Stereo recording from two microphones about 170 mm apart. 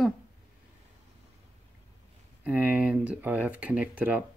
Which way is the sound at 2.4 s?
10° right (ahead or behind).